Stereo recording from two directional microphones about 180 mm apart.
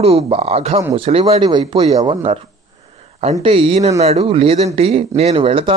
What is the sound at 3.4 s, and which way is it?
Speech, 35° right (ahead or behind).